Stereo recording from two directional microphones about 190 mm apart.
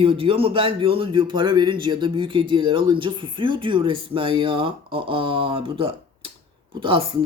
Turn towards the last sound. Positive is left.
turn(degrees=-25)  # may be behind; listen again after turning